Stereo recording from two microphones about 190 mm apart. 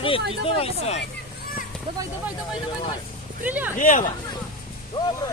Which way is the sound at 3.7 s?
45° left (ahead or behind).